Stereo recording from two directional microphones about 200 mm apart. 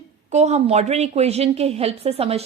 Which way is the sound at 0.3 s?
35° right (ahead or behind).